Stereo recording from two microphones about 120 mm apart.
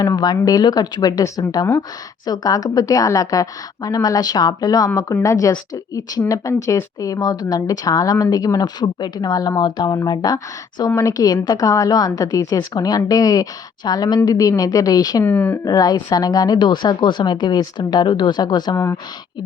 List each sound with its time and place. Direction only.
0.0 s a woman's voice: 35° left (ahead or behind)
15.2 s speech: 15° left (ahead or behind)
15.6 s a woman's voice: 35° left (ahead or behind)